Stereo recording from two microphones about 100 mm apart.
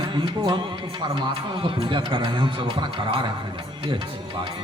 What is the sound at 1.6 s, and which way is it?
A man's voice, 60° right (ahead or behind).